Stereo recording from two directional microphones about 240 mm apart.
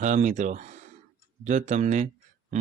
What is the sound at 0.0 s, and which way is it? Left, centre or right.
Speech, right.